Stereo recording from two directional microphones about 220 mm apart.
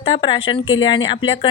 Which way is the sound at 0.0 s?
25° left (ahead or behind).